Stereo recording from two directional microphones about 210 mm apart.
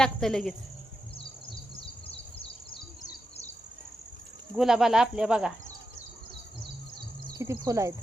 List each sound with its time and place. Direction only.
0.0 s speech: centre (ahead or behind)
1.5 s bird: 25° left (ahead or behind)
4.5 s speech: centre (ahead or behind)
7.3 s speech: 15° right (ahead or behind)